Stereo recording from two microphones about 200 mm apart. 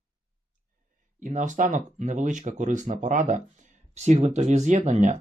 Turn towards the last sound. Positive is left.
turn(degrees=-35)  # may be behind; listen again after turning